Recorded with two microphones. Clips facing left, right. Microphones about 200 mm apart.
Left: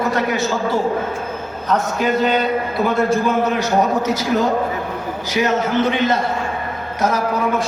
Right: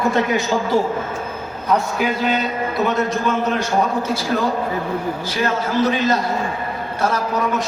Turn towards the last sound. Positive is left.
turn(degrees=25)  # may be behind; listen again after turning